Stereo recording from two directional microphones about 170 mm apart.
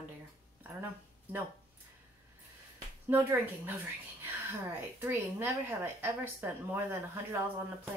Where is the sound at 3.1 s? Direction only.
10° right (ahead or behind).